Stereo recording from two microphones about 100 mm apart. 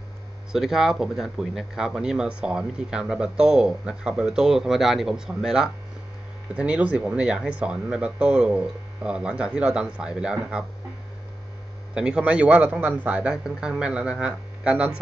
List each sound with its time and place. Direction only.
0.5 s speech: 5° right (ahead or behind)
11.9 s speech: 10° right (ahead or behind)